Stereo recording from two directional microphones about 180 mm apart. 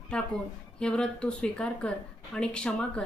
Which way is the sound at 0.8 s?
5° left (ahead or behind).